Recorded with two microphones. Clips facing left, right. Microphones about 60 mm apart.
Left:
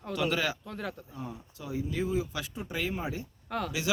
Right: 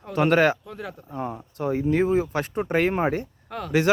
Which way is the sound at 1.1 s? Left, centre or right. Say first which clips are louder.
Right 10 dB; right.